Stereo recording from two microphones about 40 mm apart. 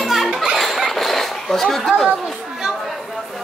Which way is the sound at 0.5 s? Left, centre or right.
Centre.